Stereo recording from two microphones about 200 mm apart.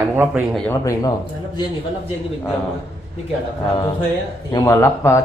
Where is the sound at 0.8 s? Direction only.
15° left (ahead or behind).